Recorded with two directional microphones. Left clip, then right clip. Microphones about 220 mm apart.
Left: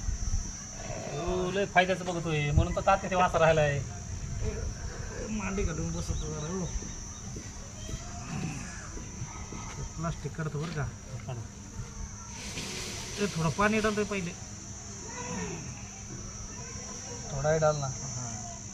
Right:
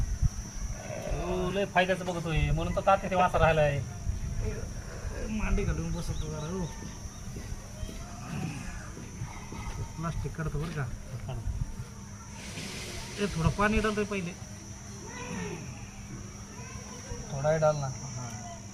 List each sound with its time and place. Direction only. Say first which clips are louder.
0.9 s speech: even; centre (ahead or behind)
5.3 s speech: even; centre (ahead or behind)
10.0 s speech: even; 5° left (ahead or behind)
13.1 s speech: even; centre (ahead or behind)
17.4 s speech: even; 15° left (ahead or behind)